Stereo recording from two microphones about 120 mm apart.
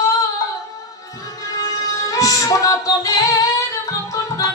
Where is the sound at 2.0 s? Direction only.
30° left (ahead or behind).